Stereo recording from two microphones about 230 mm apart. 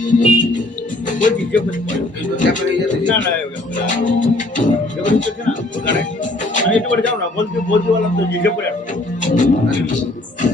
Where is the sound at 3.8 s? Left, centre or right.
Left.